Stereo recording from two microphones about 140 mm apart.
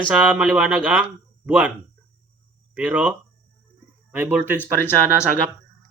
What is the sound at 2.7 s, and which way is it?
Speech, 10° right (ahead or behind).